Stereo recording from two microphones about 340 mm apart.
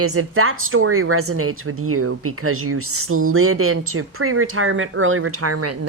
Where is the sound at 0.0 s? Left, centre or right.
Right.